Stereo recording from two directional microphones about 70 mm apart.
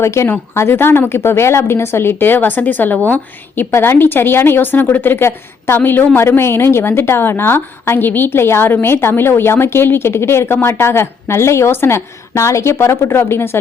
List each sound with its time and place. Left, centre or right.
0.0 s a woman's voice: left
3.6 s a woman's voice: left